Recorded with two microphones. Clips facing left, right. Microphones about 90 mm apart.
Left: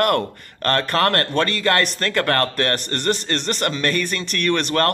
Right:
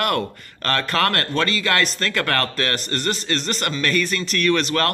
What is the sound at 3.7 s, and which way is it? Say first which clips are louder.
Speech: right 1 dB; 30° left (ahead or behind).